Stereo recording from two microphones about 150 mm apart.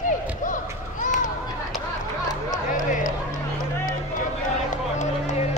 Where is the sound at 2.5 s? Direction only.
60° left (ahead or behind).